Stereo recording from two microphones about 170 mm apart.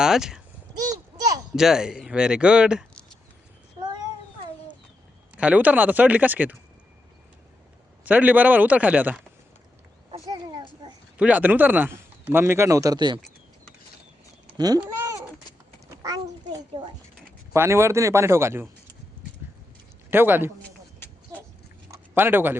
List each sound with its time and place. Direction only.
0.0 s a child's voice: 5° right (ahead or behind)
0.7 s a sound: 20° right (ahead or behind)
1.5 s speech: 5° right (ahead or behind)
5.4 s speech: 10° right (ahead or behind)
8.0 s speech: 10° right (ahead or behind)
10.1 s a sound: 25° right (ahead or behind)
11.2 s speech: 10° right (ahead or behind); by 13.1 s 25° right (ahead or behind)
14.8 s cat: 15° right (ahead or behind)
15.9 s a sound: 20° right (ahead or behind)
17.5 s speech: 15° right (ahead or behind)
20.1 s a man's voice: 10° right (ahead or behind)
21.8 s a sound: 15° right (ahead or behind)